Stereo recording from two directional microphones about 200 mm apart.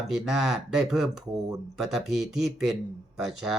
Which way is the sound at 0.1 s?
Centre (ahead or behind).